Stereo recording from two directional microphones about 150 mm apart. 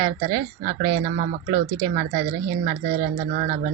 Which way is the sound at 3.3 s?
65° right (ahead or behind).